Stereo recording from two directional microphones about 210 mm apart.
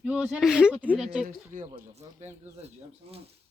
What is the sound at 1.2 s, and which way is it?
Speech, 40° right (ahead or behind).